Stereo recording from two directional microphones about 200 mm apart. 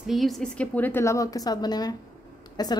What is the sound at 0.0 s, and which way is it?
A woman's voice, centre (ahead or behind).